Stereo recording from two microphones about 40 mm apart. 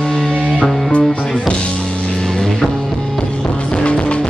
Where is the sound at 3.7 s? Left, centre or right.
Left.